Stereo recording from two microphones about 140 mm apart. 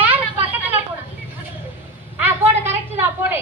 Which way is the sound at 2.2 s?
15° right (ahead or behind).